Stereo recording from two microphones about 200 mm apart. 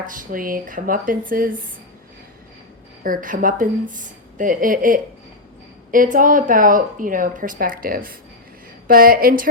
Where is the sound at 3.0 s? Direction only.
45° right (ahead or behind).